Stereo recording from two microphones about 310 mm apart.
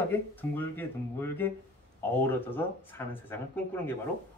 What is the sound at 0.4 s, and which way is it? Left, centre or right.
Speech, centre.